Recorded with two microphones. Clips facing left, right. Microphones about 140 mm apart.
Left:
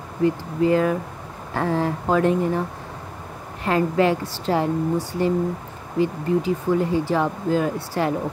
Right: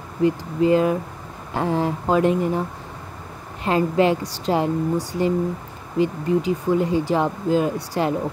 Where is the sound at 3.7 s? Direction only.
20° right (ahead or behind).